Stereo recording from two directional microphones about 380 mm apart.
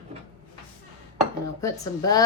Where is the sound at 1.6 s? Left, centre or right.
Centre.